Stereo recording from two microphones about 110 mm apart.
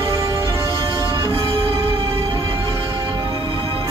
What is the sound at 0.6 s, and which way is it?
Music, 35° right (ahead or behind).